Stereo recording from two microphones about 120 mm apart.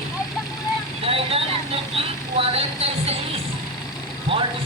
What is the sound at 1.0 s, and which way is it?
Speech, 50° right (ahead or behind).